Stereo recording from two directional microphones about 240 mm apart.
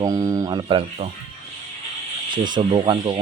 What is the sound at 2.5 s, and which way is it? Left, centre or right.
Speech, right.